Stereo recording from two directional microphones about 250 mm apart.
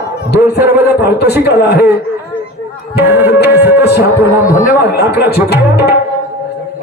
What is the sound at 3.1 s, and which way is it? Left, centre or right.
Speech, centre.